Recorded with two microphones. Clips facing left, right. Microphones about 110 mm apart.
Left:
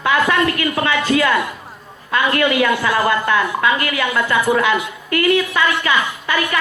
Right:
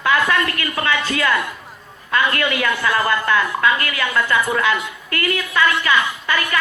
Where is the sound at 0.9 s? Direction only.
25° left (ahead or behind).